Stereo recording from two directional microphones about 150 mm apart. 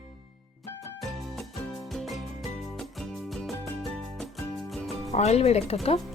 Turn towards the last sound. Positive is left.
turn(degrees=40)  # may be behind; listen again after turning